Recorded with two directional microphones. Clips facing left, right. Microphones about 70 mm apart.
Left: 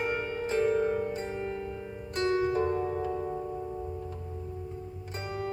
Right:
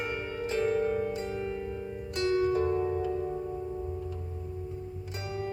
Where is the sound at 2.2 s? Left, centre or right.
Left.